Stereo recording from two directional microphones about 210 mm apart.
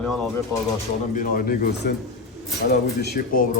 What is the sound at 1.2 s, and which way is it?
A man's voice, 45° left (ahead or behind).